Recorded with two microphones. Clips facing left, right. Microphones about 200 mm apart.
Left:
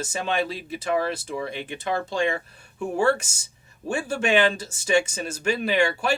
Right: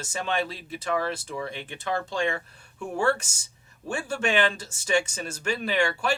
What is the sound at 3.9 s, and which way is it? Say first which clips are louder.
Speech: left 4 dB; 10° left (ahead or behind).